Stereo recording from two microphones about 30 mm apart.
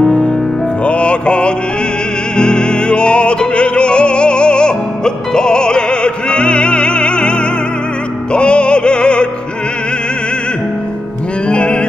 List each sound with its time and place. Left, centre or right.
0.8 s music: left
11.4 s music: left